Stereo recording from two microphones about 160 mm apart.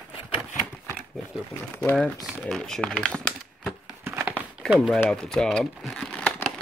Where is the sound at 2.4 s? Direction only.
5° left (ahead or behind).